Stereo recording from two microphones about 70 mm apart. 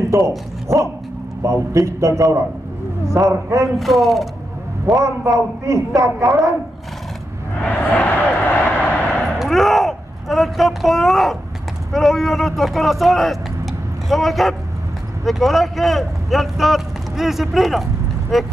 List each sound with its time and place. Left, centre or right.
1.4 s a man's voice: right
3.7 s speech: centre
4.8 s a man's voice: right
7.8 s vehicle: left
9.4 s a sound: centre
11.9 s speech: centre